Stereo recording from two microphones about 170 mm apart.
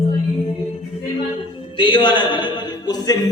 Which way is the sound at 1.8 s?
30° left (ahead or behind).